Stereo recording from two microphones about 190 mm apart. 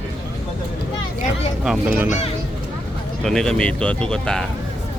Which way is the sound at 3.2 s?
5° left (ahead or behind).